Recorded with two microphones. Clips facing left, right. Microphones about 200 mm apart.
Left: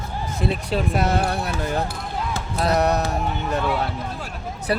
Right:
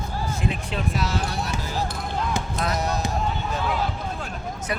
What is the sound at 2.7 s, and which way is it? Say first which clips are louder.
Speech: left 8 dB; 65° left (ahead or behind).